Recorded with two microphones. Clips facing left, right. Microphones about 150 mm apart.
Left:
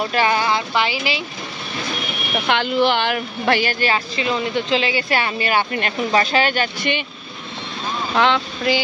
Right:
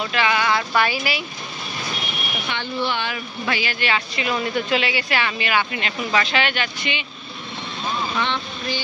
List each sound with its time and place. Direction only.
0.0 s speech: 40° left (ahead or behind); by 1.2 s 20° left (ahead or behind)
2.4 s speech: 90° left; by 3.7 s 55° left (ahead or behind)
3.8 s speech: 35° left (ahead or behind)
8.1 s speech: 90° left